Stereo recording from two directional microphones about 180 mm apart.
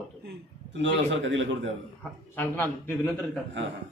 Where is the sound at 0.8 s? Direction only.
90° right.